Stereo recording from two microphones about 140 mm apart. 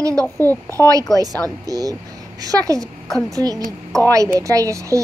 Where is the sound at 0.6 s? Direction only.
25° right (ahead or behind).